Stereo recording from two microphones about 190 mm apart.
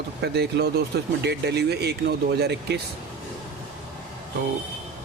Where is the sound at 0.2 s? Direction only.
60° right (ahead or behind).